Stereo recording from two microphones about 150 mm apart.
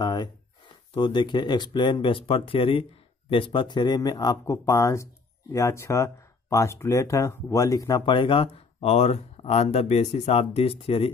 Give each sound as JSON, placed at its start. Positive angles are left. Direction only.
{"t": 0.0, "sound": "a sound", "side_deg": 25}
{"t": 0.9, "sound": "speech", "side_deg": 30}
{"t": 8.0, "sound": "speech", "side_deg": 35}